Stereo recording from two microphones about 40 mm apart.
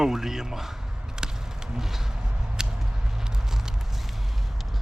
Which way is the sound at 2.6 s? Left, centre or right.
Centre.